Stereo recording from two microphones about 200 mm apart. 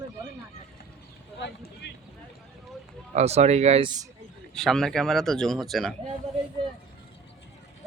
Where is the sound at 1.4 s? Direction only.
60° left (ahead or behind).